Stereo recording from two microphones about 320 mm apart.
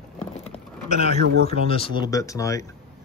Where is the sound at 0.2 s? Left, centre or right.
Centre.